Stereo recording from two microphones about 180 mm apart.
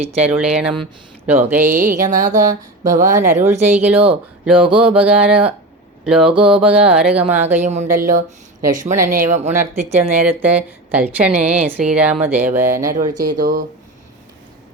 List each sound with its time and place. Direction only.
0.2 s a woman's voice: 5° right (ahead or behind)
1.6 s a sound: 45° right (ahead or behind)
3.3 s a woman's voice: 15° right (ahead or behind)
4.6 s mantra: 30° right (ahead or behind)
4.9 s speech: 5° right (ahead or behind)
6.3 s mantra: 30° right (ahead or behind)
6.6 s speech: 5° right (ahead or behind)
7.6 s a sound: 40° right (ahead or behind)
10.0 s a woman's voice: 10° right (ahead or behind)
12.9 s a sound: 50° right (ahead or behind)